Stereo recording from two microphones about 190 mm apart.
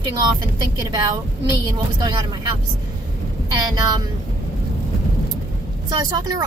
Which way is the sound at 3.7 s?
20° right (ahead or behind).